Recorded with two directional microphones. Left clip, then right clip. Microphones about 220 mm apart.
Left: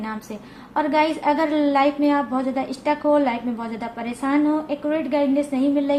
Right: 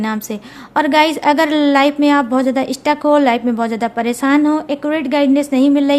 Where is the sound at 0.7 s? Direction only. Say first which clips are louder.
Right 7 dB; 45° right (ahead or behind).